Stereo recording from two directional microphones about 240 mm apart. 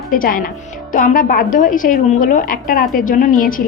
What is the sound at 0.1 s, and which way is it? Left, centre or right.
A woman's voice, left.